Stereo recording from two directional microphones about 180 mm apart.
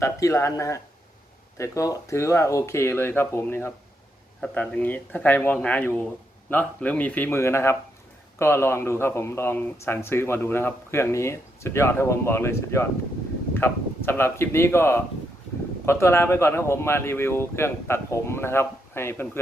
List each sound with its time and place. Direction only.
0.0 s speech: 15° left (ahead or behind)